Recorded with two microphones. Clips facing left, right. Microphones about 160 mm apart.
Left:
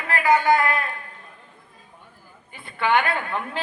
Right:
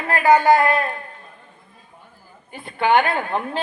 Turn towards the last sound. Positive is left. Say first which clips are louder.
# right 4 dB
turn(degrees=-35)  # may be behind; listen again after turning